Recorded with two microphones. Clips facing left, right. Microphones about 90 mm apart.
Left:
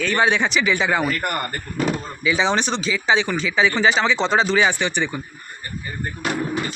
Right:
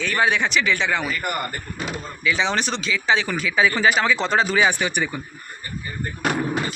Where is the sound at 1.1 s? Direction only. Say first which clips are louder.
Left 3 dB; 65° left (ahead or behind).